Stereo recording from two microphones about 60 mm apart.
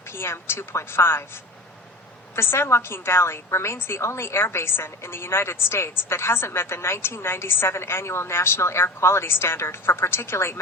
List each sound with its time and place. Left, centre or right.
0.1 s a woman's voice: left
2.3 s a woman's voice: left